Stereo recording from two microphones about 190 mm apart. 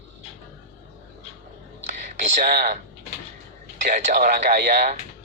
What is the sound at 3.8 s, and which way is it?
Speech, 45° right (ahead or behind).